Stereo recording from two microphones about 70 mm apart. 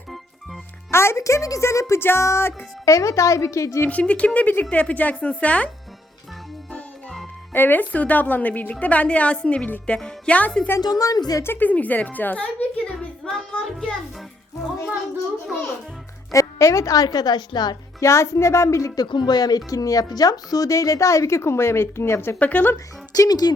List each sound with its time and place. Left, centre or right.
0.9 s music: left
2.0 s speech: left
3.8 s a woman's voice: centre
7.5 s a woman's voice: left
10.8 s a woman's voice: left
11.4 s a woman's voice: left
13.7 s speech: centre
16.3 s a woman's voice: left
18.0 s speech: left
18.9 s speech: left
22.4 s a woman's voice: left
23.1 s a woman's voice: left